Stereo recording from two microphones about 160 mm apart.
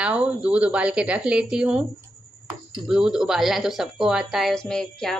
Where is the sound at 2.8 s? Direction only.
5° right (ahead or behind).